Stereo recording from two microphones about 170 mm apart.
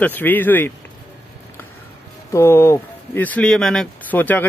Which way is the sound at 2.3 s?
15° left (ahead or behind).